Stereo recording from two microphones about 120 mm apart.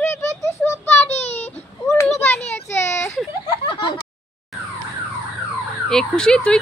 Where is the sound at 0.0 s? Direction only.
20° left (ahead or behind).